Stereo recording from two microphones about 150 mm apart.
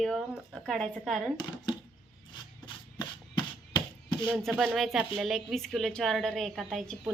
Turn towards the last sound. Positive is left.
turn(degrees=5)  # may be behind; listen again after turning